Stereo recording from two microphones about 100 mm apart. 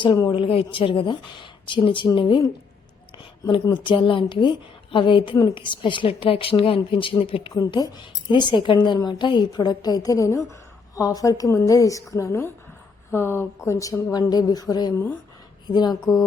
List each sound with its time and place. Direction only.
0.3 s speech: 65° left (ahead or behind)
3.5 s speech: 55° left (ahead or behind)
7.7 s a woman's voice: 45° left (ahead or behind)